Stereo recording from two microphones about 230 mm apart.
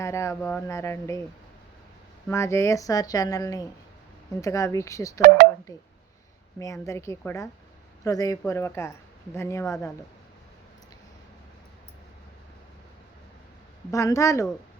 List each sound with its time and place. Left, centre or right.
0.0 s speech: centre
2.2 s speech: centre
6.6 s speech: centre
13.9 s speech: centre